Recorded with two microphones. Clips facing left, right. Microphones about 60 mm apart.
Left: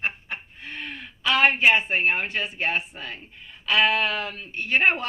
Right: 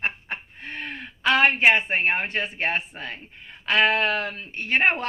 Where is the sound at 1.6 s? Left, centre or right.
Right.